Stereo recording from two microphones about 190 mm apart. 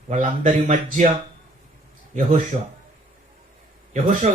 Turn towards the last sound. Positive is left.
turn(degrees=-40)  # may be behind; listen again after turning